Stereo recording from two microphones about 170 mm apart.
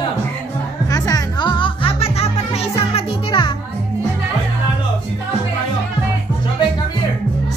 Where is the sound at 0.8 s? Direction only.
20° left (ahead or behind).